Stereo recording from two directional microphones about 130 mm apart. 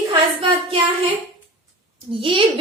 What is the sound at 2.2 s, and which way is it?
Speech, 40° right (ahead or behind).